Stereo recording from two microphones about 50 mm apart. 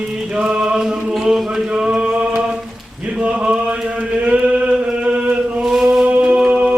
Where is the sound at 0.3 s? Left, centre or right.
Centre.